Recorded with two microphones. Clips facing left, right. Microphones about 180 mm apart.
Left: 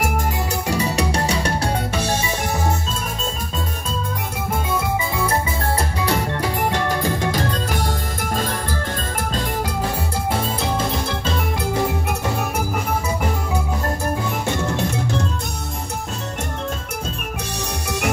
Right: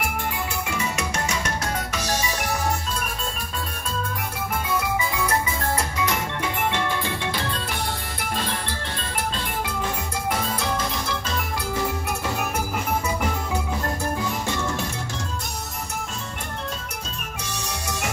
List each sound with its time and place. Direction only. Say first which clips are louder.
0.7 s music: left 7 dB; 35° left (ahead or behind)
4.6 s music: left 1 dB; 30° left (ahead or behind)
17.8 s music: left 7 dB; 65° left (ahead or behind)